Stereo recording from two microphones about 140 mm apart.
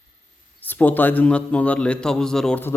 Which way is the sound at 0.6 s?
10° left (ahead or behind).